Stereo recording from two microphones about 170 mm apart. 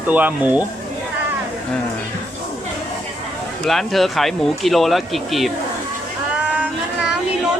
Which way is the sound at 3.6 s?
Centre (ahead or behind).